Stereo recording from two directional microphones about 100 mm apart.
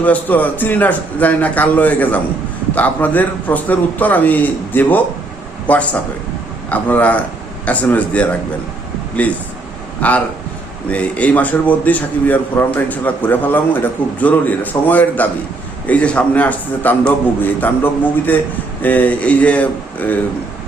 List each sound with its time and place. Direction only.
0.0 s a man's voice: 15° left (ahead or behind)
10.0 s a man's voice: 15° left (ahead or behind)